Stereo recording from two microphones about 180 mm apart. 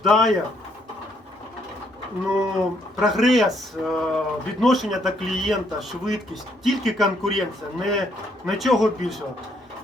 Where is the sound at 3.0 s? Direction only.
Centre (ahead or behind).